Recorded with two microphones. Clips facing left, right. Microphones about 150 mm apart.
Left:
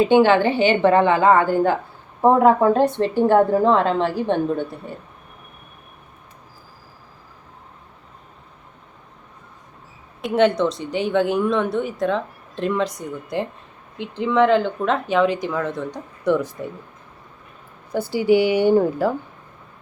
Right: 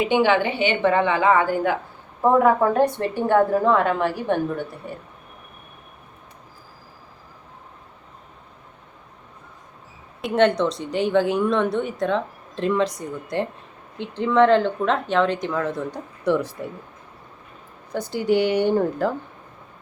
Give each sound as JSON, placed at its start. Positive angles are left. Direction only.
{"t": 0.4, "sound": "a woman's voice", "side_deg": 40}
{"t": 1.3, "sound": "speech", "side_deg": -10}
{"t": 2.2, "sound": "a woman's voice", "side_deg": 20}
{"t": 10.2, "sound": "speech", "side_deg": 0}
{"t": 17.9, "sound": "speech", "side_deg": 5}